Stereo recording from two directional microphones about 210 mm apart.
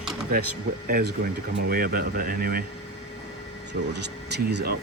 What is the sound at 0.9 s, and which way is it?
Speech, 40° right (ahead or behind).